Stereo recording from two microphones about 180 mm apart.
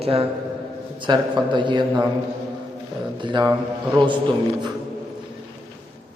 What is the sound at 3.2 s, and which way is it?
Speech, 25° right (ahead or behind).